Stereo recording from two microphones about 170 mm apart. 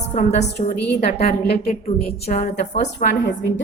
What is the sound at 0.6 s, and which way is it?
Speech, 85° left.